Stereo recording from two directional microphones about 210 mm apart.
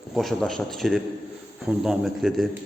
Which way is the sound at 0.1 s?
Centre (ahead or behind).